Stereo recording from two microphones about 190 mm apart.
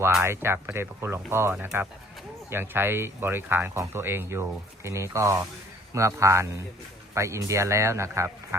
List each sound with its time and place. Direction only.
0.0 s speech: 10° right (ahead or behind)